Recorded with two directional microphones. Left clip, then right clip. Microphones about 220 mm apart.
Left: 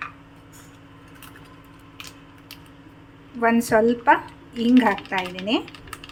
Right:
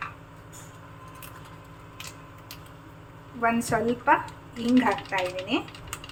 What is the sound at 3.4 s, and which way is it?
Speech, 50° left (ahead or behind).